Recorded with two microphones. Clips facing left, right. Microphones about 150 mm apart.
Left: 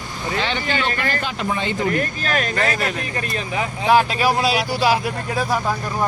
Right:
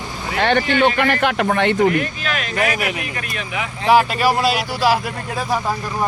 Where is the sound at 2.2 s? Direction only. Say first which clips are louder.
Left 2 dB; 40° left (ahead or behind).